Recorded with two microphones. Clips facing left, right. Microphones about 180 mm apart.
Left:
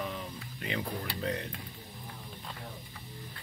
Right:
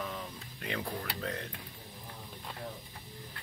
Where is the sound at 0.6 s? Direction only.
5° left (ahead or behind).